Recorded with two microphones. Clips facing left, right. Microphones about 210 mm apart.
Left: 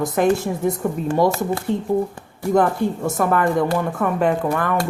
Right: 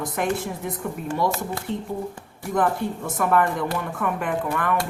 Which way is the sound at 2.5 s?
45° left (ahead or behind).